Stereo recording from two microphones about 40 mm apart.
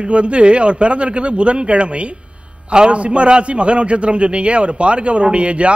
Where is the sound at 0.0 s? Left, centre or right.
Right.